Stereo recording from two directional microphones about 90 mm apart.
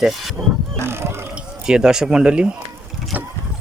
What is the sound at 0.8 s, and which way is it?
Speech, 30° right (ahead or behind).